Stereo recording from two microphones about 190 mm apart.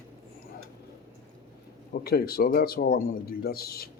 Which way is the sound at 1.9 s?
55° left (ahead or behind).